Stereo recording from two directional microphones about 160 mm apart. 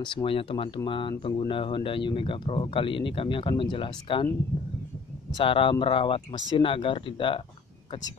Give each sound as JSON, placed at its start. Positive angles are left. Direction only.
{"t": 0.0, "sound": "speech", "side_deg": 30}
{"t": 5.3, "sound": "speech", "side_deg": 35}